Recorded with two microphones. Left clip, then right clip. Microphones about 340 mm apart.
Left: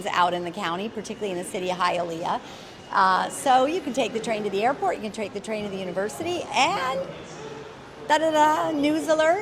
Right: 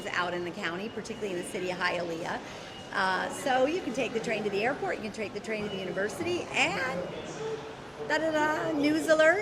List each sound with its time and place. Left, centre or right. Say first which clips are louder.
0.0 s a woman's voice: left 8 dB; left
8.0 s a woman's voice: left 8 dB; left
8.8 s a woman's voice: right 2 dB; left